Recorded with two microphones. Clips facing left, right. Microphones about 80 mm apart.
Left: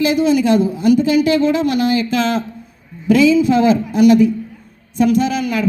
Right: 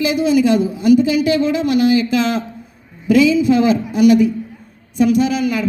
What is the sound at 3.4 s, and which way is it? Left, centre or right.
Speech, left.